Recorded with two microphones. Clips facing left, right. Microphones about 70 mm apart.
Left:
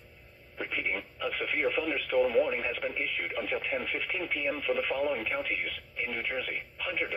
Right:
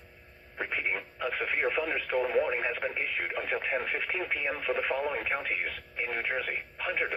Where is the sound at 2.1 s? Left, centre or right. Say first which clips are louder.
Left 3 dB; right.